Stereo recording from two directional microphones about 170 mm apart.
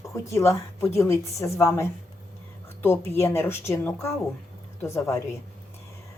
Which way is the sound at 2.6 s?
15° left (ahead or behind).